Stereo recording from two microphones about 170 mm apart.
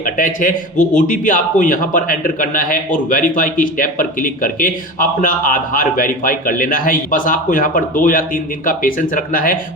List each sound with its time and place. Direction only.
0.0 s speech: 50° left (ahead or behind)